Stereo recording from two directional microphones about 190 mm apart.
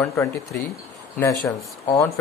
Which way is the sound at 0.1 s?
15° left (ahead or behind).